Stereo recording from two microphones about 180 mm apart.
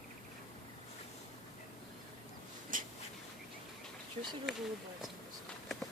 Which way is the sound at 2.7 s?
50° right (ahead or behind).